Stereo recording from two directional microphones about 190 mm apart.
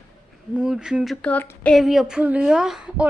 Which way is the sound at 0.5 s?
5° right (ahead or behind).